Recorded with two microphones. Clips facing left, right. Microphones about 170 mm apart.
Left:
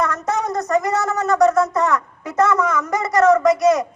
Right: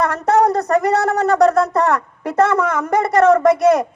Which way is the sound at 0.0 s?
60° right (ahead or behind).